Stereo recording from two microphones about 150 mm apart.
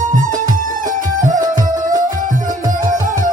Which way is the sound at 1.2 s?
60° right (ahead or behind).